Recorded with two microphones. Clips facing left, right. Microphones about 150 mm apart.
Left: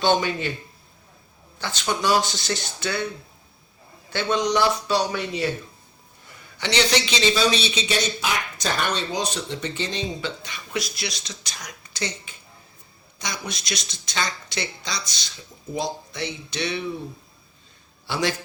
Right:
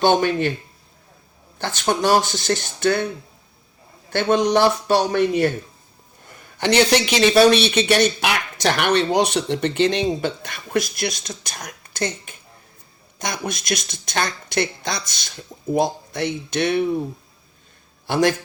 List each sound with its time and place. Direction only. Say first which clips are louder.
0.0 s speech: right 4 dB; 50° right (ahead or behind)
1.5 s speech: right 5 dB; 50° right (ahead or behind)
4.1 s speech: right 5 dB; 50° right (ahead or behind)
6.6 s a man's voice: right 6 dB; 55° right (ahead or behind)
18.0 s a man's voice: right 7 dB; 50° right (ahead or behind)